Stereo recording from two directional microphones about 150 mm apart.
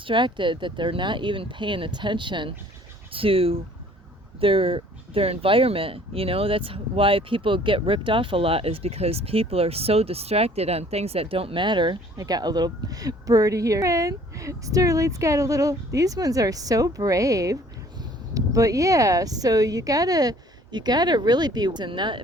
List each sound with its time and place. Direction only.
0.1 s speech: 30° right (ahead or behind)